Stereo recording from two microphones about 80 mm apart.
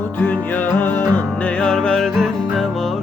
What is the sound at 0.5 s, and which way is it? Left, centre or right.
Music, left.